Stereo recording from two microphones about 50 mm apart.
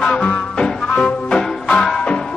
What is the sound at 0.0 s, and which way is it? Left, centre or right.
Music, centre.